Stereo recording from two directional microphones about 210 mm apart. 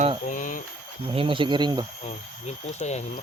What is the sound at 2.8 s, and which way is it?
Speech, 30° left (ahead or behind).